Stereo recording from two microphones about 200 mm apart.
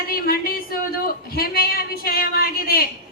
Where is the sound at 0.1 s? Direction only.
45° left (ahead or behind).